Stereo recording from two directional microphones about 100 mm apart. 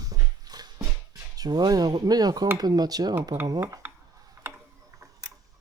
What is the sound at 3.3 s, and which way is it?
Speech, 90° right.